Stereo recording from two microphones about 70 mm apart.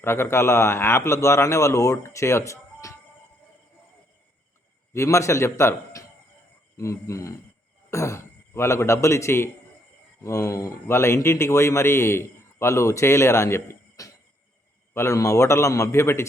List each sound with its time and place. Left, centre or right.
0.0 s a man's voice: left
4.9 s a man's voice: left
14.0 s a sound: left
14.9 s speech: left